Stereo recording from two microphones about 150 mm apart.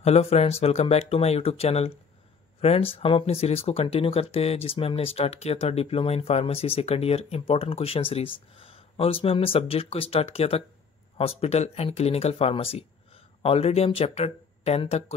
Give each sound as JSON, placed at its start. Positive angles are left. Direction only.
{"t": 0.0, "sound": "speech", "side_deg": 45}